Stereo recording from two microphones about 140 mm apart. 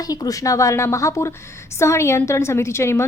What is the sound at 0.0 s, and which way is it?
A woman's voice, 25° left (ahead or behind).